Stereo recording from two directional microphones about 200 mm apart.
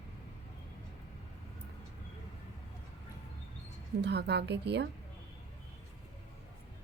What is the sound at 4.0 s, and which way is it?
Speech, 55° right (ahead or behind).